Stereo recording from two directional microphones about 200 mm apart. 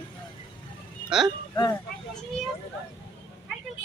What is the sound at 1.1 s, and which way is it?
Speech, centre (ahead or behind).